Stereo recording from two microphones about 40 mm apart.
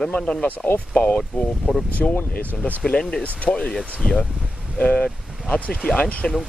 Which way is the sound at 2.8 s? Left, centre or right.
Centre.